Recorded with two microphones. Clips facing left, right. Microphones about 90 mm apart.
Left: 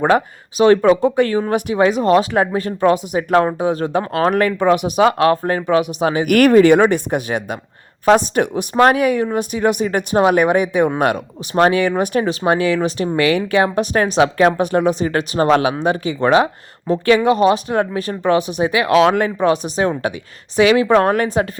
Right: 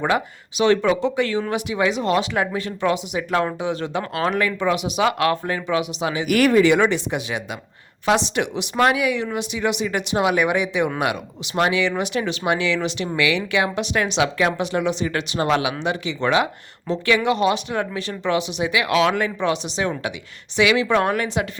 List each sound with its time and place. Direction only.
0.0 s speech: 40° left (ahead or behind)